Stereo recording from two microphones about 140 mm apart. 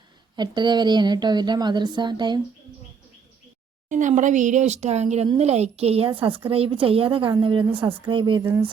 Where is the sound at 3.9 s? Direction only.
65° right (ahead or behind); by 8.4 s 35° right (ahead or behind).